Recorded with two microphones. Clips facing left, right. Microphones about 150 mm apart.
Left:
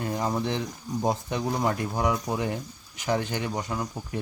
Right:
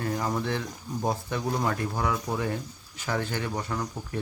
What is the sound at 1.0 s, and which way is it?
Speech, 20° left (ahead or behind).